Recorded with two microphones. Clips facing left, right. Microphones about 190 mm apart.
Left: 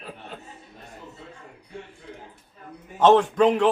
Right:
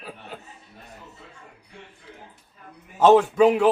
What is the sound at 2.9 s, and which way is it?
Speech, 5° right (ahead or behind).